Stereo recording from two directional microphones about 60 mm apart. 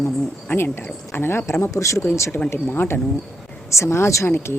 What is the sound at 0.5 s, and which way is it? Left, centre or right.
Speech, left.